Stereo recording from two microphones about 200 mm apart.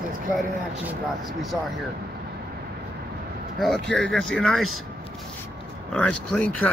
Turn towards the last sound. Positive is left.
turn(degrees=5)  # may be behind; listen again after turning